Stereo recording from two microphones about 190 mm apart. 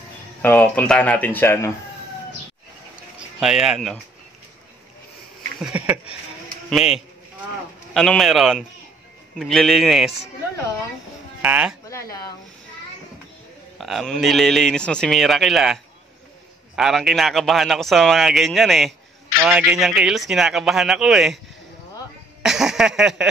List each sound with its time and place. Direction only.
0.4 s speech: 10° left (ahead or behind)
3.3 s speech: 5° right (ahead or behind)
5.6 s speech: 5° right (ahead or behind)
11.4 s speech: 10° right (ahead or behind)
11.9 s a sound: 15° left (ahead or behind)
13.7 s speech: centre (ahead or behind)
22.4 s speech: centre (ahead or behind)